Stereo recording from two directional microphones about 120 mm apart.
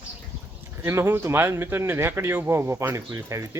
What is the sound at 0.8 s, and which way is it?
Speech, 20° right (ahead or behind).